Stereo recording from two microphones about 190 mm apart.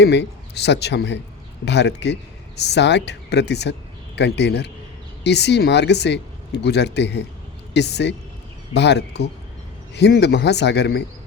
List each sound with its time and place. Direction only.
0.0 s speech: 60° left (ahead or behind)